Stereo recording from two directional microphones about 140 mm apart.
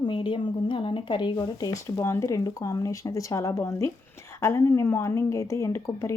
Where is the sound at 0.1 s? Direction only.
35° left (ahead or behind).